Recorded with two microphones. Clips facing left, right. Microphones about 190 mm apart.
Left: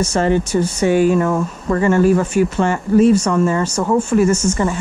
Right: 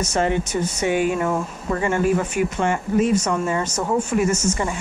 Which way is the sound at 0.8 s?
40° left (ahead or behind).